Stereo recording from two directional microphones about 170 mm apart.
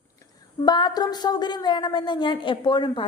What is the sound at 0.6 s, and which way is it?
A woman's voice, 25° left (ahead or behind).